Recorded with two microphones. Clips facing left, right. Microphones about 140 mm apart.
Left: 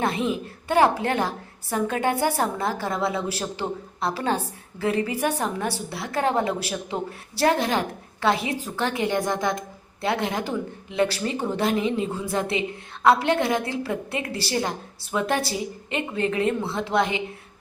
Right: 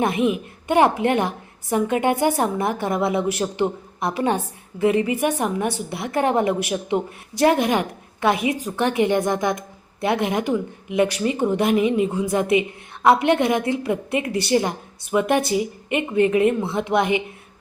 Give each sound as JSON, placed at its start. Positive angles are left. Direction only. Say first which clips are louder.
{"t": 0.0, "sound": "a woman's voice", "louder": "right 4 dB", "side_deg": -15}